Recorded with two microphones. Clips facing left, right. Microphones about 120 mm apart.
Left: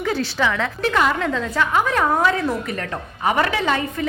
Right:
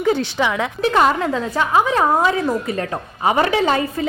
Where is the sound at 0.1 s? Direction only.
20° right (ahead or behind).